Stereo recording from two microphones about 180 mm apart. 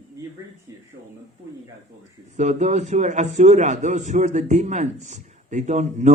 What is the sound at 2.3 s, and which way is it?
A man's voice, 40° right (ahead or behind).